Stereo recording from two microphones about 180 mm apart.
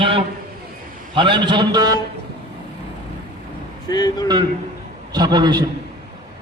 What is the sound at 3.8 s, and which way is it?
Speech, 20° left (ahead or behind).